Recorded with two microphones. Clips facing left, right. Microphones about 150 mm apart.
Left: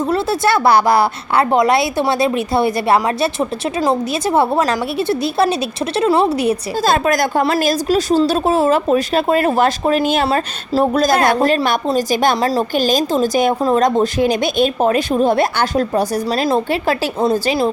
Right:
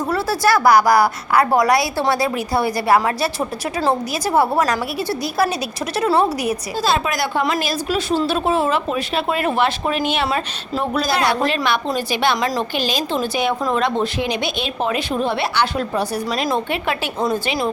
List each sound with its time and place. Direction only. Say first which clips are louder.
0.1 s a woman's voice: even; 25° left (ahead or behind)
6.1 s a woman's voice: left 2 dB; 15° left (ahead or behind)
6.3 s a woman's voice: left 5 dB; 30° left (ahead or behind)
6.8 s a woman's voice: left 5 dB; 45° left (ahead or behind)